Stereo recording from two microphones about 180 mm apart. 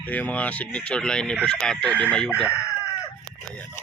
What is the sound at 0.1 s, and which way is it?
Speech, 10° left (ahead or behind).